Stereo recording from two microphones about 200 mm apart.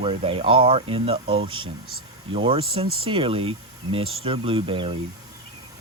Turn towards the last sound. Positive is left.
turn(degrees=-25)  # may be behind; listen again after turning